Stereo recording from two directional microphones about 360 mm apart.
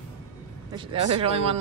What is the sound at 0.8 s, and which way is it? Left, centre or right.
Speech, centre.